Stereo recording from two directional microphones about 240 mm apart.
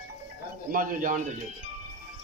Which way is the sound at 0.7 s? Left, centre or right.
Right.